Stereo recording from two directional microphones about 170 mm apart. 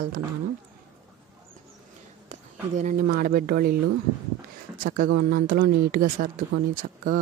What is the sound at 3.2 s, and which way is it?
Speech, 55° right (ahead or behind).